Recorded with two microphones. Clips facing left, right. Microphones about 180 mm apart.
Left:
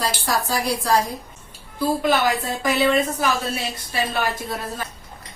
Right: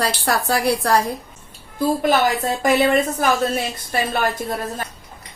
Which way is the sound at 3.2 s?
50° right (ahead or behind).